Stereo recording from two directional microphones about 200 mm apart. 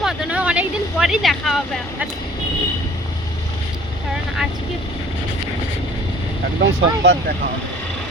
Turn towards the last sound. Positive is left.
turn(degrees=-60)  # may be behind; listen again after turning